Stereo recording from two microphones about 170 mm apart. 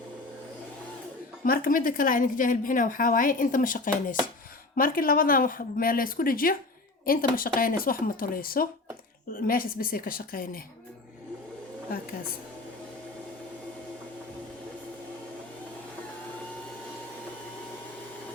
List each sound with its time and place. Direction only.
1.5 s a woman's voice: 55° left (ahead or behind)
11.9 s speech: 60° left (ahead or behind)